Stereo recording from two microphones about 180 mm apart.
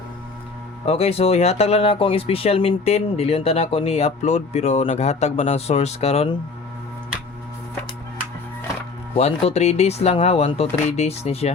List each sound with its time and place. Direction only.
0.9 s speech: 35° left (ahead or behind)
9.1 s speech: 35° left (ahead or behind)